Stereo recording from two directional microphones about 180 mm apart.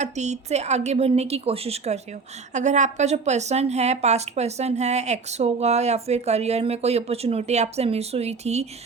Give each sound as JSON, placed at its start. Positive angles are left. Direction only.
{"t": 0.0, "sound": "a woman's voice", "side_deg": -40}